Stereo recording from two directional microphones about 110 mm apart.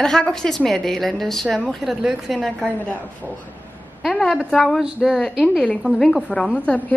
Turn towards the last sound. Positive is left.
turn(degrees=10)  # may be behind; listen again after turning